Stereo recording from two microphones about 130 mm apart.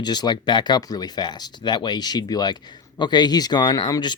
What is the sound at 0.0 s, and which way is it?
Speech, 35° left (ahead or behind).